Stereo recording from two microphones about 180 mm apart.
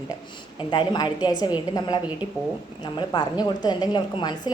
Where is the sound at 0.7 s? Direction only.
25° left (ahead or behind).